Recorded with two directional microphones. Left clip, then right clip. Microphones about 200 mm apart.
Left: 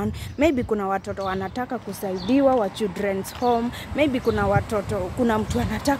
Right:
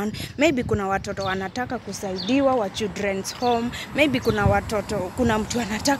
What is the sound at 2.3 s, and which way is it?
Speech, 20° left (ahead or behind).